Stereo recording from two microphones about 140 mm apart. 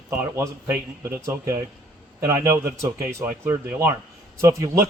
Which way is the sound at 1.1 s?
20° right (ahead or behind).